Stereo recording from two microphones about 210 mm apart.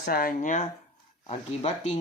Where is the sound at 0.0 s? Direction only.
45° left (ahead or behind).